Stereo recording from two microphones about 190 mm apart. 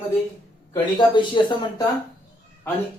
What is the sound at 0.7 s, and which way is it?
Speech, 25° left (ahead or behind).